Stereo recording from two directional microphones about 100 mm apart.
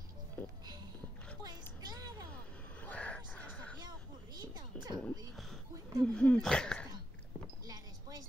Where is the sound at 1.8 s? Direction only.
45° right (ahead or behind).